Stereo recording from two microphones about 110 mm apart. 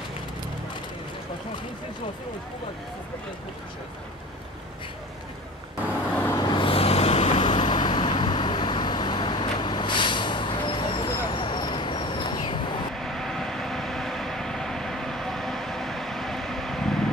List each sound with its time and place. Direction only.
6.3 s vehicle: 45° left (ahead or behind)
12.9 s vehicle: 5° left (ahead or behind)